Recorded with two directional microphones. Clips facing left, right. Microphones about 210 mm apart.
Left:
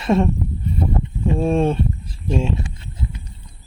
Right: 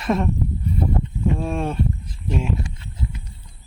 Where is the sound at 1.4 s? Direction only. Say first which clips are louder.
Left 6 dB; 25° left (ahead or behind).